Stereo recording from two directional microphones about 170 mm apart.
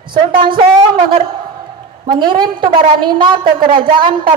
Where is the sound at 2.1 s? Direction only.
25° right (ahead or behind).